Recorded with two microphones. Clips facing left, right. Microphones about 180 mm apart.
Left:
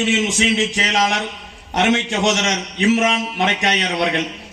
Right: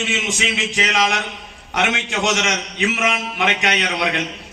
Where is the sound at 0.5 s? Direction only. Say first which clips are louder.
Left 2 dB; 40° left (ahead or behind).